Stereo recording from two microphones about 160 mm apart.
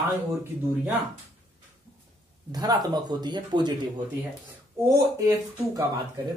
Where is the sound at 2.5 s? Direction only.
25° right (ahead or behind).